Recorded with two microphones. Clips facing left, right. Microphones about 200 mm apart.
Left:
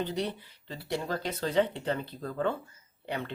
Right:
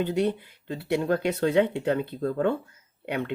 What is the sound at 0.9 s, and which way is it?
Speech, 60° right (ahead or behind).